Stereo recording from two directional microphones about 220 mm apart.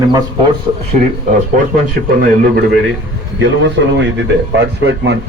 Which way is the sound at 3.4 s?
55° right (ahead or behind).